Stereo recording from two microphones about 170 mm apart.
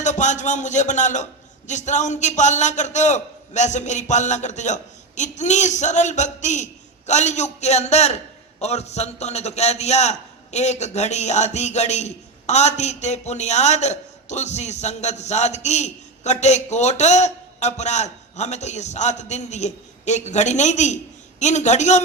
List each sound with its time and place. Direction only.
0.0 s a man's voice: 45° left (ahead or behind)